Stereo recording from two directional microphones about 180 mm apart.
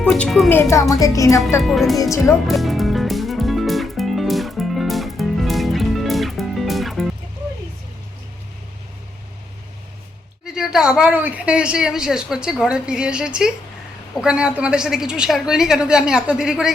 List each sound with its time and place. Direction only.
0.0 s a woman's voice: 5° left (ahead or behind)
0.5 s a woman's voice: 15° left (ahead or behind)
1.6 s a woman's voice: centre (ahead or behind)
2.5 s music: centre (ahead or behind)
10.4 s a woman's voice: 5° right (ahead or behind)